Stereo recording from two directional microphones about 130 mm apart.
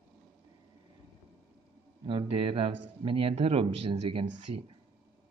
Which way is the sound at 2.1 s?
40° right (ahead or behind).